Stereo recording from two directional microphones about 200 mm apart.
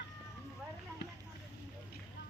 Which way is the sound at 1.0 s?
60° left (ahead or behind).